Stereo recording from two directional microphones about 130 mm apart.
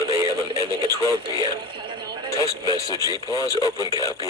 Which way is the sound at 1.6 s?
40° right (ahead or behind).